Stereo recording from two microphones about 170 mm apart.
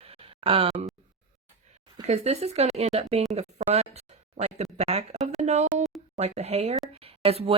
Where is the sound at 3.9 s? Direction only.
40° right (ahead or behind).